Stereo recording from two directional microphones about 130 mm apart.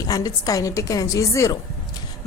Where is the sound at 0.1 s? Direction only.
30° left (ahead or behind).